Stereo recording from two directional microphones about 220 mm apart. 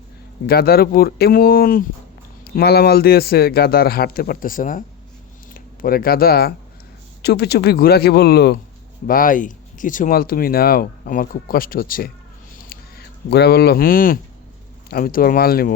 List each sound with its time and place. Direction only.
0.4 s speech: 45° left (ahead or behind)
12.6 s a sound: 45° left (ahead or behind)
14.8 s speech: 40° left (ahead or behind)